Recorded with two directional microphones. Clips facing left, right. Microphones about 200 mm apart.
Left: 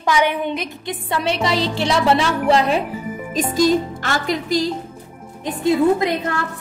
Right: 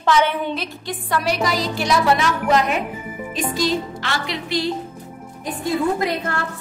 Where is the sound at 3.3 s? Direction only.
45° left (ahead or behind).